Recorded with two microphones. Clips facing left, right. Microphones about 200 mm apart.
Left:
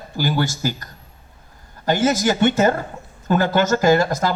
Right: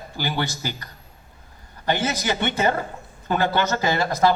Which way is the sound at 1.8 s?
45° left (ahead or behind).